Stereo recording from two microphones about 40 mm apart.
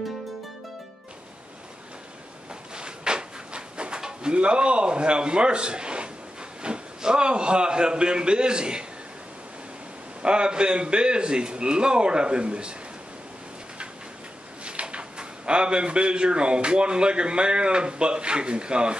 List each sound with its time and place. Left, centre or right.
2.7 s drawer open or close: right
6.6 s a man's voice: right
10.2 s a man's voice: right
14.6 s a man's voice: right